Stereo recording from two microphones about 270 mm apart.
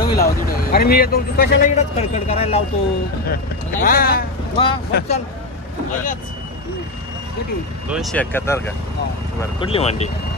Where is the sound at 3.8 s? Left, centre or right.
Left.